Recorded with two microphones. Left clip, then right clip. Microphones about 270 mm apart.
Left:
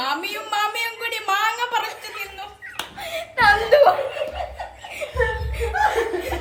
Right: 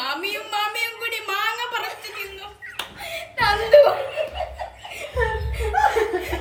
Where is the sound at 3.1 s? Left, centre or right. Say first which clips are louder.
Left 5 dB; centre.